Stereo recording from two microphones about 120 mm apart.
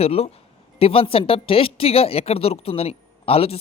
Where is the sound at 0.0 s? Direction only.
55° left (ahead or behind).